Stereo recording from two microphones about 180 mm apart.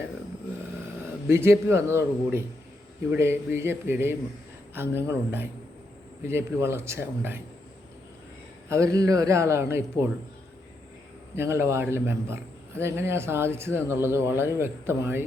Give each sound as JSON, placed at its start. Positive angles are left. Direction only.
{"t": 1.3, "sound": "speech", "side_deg": -15}
{"t": 9.0, "sound": "speech", "side_deg": -20}
{"t": 11.3, "sound": "speech", "side_deg": -15}